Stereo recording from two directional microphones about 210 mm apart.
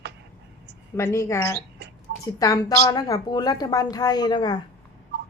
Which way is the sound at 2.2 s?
15° left (ahead or behind).